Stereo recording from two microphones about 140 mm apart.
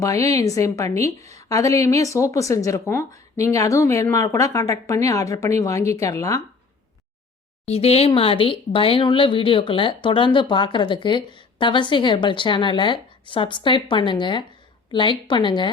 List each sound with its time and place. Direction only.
0.0 s speech: 25° left (ahead or behind)
7.6 s speech: 45° left (ahead or behind)